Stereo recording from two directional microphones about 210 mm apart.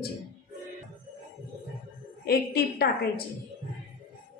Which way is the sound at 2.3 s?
50° left (ahead or behind).